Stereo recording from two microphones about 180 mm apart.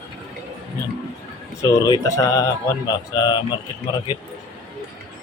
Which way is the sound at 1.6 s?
20° left (ahead or behind).